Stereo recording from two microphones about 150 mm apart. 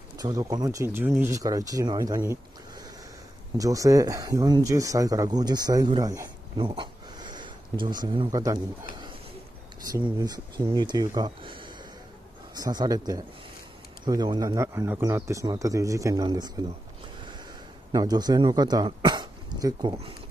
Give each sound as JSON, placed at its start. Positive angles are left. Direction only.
{"t": 0.2, "sound": "speech", "side_deg": -25}
{"t": 3.5, "sound": "speech", "side_deg": -20}
{"t": 6.7, "sound": "a sound", "side_deg": -30}
{"t": 9.8, "sound": "speech", "side_deg": -25}
{"t": 17.9, "sound": "speech", "side_deg": -25}